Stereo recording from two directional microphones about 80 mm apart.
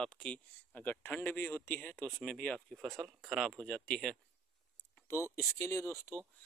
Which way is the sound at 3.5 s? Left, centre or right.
Centre.